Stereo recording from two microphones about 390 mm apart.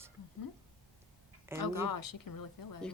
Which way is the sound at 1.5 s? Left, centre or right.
Centre.